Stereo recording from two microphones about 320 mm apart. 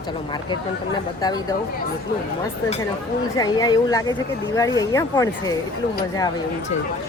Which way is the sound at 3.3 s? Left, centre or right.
Centre.